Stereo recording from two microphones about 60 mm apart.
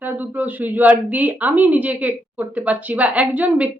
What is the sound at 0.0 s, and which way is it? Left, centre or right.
A woman's voice, right.